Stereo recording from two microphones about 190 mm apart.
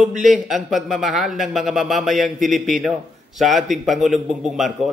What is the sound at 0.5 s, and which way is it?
A man's voice, centre (ahead or behind).